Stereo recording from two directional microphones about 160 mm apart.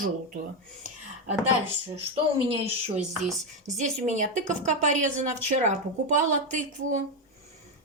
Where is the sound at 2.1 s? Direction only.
35° right (ahead or behind).